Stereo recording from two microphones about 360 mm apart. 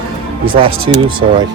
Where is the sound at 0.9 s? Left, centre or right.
Right.